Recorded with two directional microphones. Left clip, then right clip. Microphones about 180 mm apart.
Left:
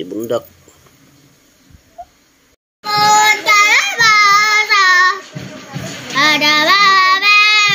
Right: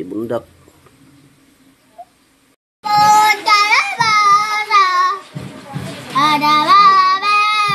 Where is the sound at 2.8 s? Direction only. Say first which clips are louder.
Even; 20° right (ahead or behind).